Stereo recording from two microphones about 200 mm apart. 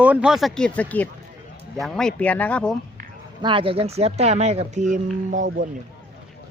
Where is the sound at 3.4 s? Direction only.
25° right (ahead or behind); by 5.7 s 40° right (ahead or behind).